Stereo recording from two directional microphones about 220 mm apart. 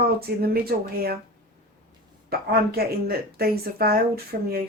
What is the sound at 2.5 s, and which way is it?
Speech, 45° right (ahead or behind).